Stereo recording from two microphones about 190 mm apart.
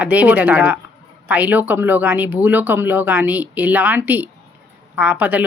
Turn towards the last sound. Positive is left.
turn(degrees=-10)  # may be behind; listen again after turning